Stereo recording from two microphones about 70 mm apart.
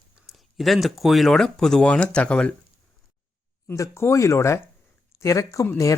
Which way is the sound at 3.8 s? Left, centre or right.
Left.